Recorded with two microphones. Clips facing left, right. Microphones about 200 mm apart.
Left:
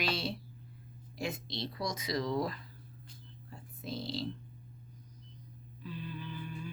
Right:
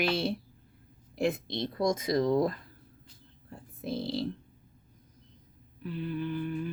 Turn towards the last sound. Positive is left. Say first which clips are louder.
# right 10 dB
turn(degrees=-55)  # may be behind; listen again after turning